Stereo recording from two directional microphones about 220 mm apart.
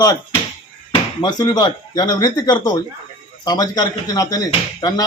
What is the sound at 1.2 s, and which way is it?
Speech, 20° left (ahead or behind).